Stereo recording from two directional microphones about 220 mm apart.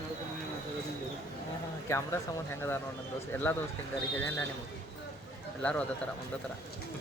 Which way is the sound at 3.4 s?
10° left (ahead or behind).